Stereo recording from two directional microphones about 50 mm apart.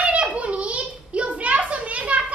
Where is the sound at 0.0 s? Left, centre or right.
Right.